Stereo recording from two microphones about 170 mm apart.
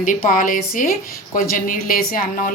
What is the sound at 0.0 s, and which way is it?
A woman's voice, 50° left (ahead or behind).